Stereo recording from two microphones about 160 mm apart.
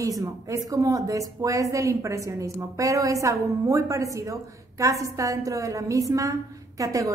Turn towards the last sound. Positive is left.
turn(degrees=-20)  # may be behind; listen again after turning